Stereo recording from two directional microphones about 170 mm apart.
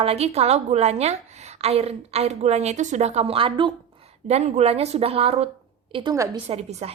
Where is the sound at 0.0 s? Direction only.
35° right (ahead or behind).